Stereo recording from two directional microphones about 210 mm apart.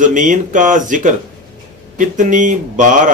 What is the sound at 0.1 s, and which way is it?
A man's voice, 40° right (ahead or behind).